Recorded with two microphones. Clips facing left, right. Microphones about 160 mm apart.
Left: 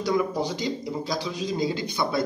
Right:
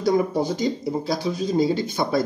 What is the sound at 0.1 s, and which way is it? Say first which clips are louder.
Speech: right 4 dB; 35° right (ahead or behind).